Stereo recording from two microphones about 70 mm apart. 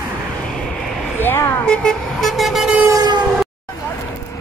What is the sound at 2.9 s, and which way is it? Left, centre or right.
Vehicle, right.